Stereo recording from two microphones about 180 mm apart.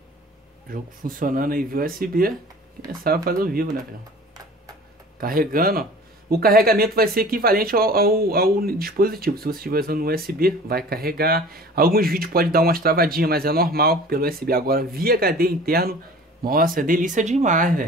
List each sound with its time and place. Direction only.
0.7 s speech: 50° right (ahead or behind)
5.2 s speech: 50° right (ahead or behind)